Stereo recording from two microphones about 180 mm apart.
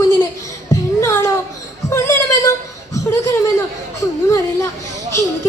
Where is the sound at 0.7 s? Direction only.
15° left (ahead or behind).